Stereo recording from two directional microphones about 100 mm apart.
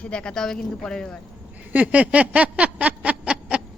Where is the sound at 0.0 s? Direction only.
10° left (ahead or behind).